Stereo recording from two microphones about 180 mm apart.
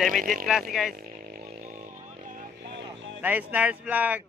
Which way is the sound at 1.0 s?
55° right (ahead or behind).